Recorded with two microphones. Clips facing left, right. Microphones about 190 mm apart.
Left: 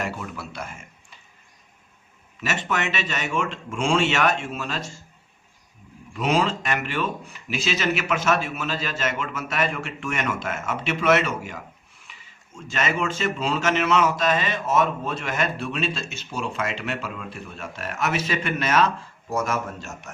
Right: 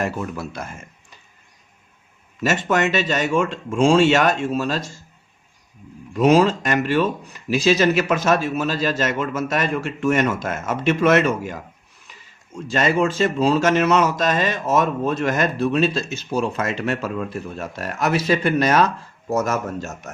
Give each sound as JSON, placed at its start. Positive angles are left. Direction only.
{"t": 0.0, "sound": "speech", "side_deg": -45}
{"t": 2.4, "sound": "speech", "side_deg": -40}
{"t": 6.1, "sound": "speech", "side_deg": -40}